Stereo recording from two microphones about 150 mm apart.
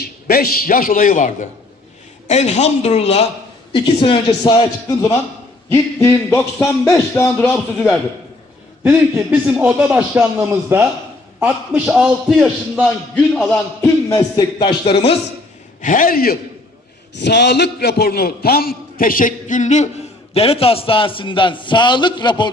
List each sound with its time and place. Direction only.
0.0 s a man's voice: 90° left; by 1.5 s 60° left (ahead or behind)
2.2 s a man's voice: 50° left (ahead or behind); by 5.1 s 30° left (ahead or behind)
5.7 s a man's voice: 20° left (ahead or behind)
8.8 s a man's voice: 15° right (ahead or behind); by 13.4 s 5° left (ahead or behind)
13.5 s speech: 20° left (ahead or behind); by 15.1 s 35° left (ahead or behind)
15.8 s a man's voice: 60° left (ahead or behind)
17.2 s a man's voice: 90° left; by 19.9 s 50° left (ahead or behind)
20.3 s a man's voice: 40° left (ahead or behind)